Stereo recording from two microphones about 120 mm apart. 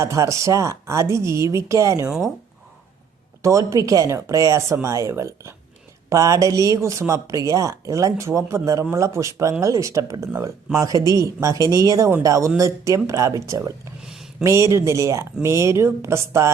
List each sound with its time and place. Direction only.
0.0 s speech: 25° right (ahead or behind)
3.7 s speech: 30° right (ahead or behind)
14.0 s a sound: 5° right (ahead or behind)
14.4 s speech: 25° right (ahead or behind)